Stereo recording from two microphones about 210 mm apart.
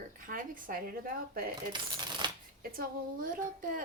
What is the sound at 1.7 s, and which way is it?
Speech, 20° right (ahead or behind).